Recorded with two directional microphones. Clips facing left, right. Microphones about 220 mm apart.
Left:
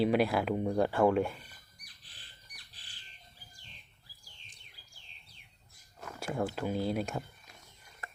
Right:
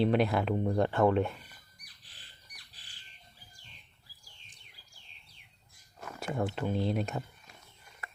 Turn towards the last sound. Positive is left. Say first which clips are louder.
# right 1 dB
turn(degrees=5)  # may be behind; listen again after turning